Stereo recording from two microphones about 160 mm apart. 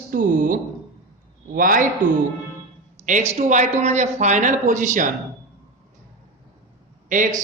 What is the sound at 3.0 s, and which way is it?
A man's voice, 45° right (ahead or behind).